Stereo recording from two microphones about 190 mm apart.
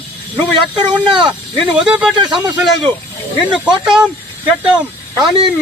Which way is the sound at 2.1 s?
25° right (ahead or behind).